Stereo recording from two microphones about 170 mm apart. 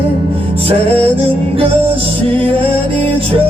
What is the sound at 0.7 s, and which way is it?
Music, 35° right (ahead or behind).